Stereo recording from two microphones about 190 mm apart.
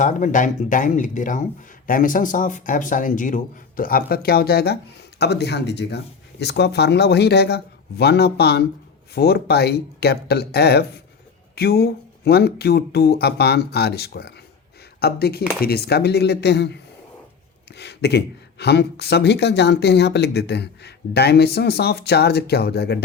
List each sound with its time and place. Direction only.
0.0 s speech: 40° left (ahead or behind); by 16.7 s 60° left (ahead or behind)
17.7 s speech: 60° left (ahead or behind)